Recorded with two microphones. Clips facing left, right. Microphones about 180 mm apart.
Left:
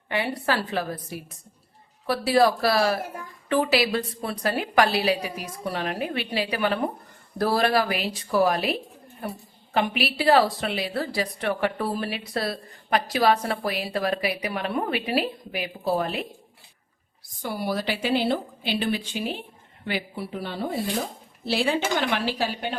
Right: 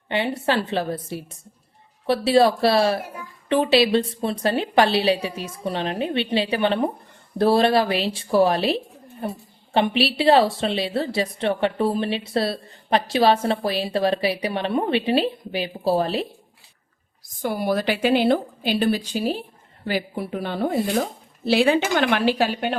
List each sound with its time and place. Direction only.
0.1 s a woman's voice: 25° right (ahead or behind)
17.4 s a woman's voice: 50° right (ahead or behind)